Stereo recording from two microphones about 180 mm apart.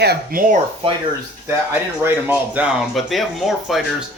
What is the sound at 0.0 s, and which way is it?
Speech, 60° right (ahead or behind).